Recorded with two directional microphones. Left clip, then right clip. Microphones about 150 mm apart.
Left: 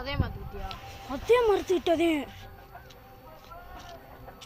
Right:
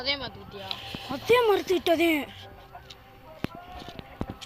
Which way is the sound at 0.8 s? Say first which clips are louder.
Right 3 dB; centre (ahead or behind).